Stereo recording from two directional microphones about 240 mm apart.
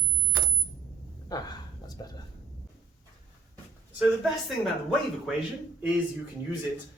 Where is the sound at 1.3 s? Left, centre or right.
Centre.